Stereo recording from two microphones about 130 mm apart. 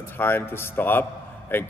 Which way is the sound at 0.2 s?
15° left (ahead or behind).